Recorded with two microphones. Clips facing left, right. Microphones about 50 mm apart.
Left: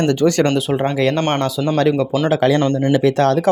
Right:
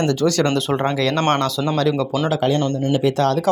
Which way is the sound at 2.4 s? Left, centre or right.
Left.